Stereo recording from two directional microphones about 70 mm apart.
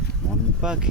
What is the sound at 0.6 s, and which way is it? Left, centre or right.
Mantra, centre.